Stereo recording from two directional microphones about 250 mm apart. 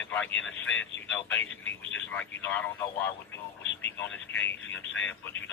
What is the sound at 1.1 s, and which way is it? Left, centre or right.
Speech, centre.